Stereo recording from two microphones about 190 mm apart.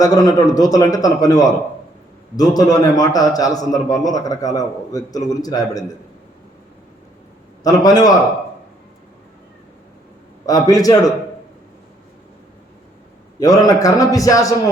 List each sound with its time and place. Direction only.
0.0 s a man's voice: 20° left (ahead or behind)
7.6 s a man's voice: 20° left (ahead or behind)
10.4 s a man's voice: 20° left (ahead or behind)
13.4 s a man's voice: 20° left (ahead or behind)